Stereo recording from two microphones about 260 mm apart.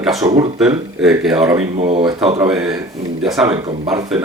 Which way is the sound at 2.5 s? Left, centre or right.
Centre.